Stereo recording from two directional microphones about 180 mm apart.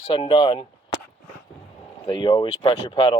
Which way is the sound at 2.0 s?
25° left (ahead or behind).